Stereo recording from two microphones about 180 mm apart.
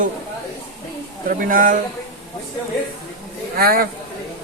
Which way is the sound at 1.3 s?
50° right (ahead or behind).